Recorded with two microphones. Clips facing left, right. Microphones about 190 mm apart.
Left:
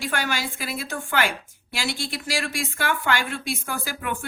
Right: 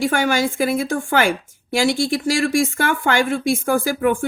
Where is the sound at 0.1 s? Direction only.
50° right (ahead or behind).